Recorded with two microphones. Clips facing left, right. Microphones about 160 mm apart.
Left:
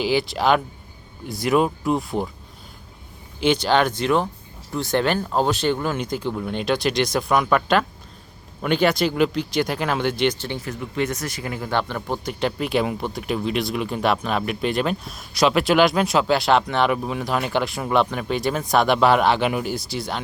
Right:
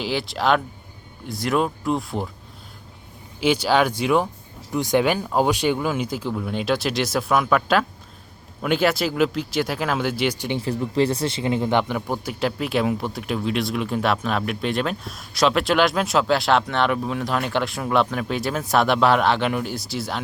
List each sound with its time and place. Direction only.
0.0 s speech: centre (ahead or behind)
3.4 s speech: 5° right (ahead or behind)
10.6 s speech: 30° right (ahead or behind); by 20.1 s centre (ahead or behind)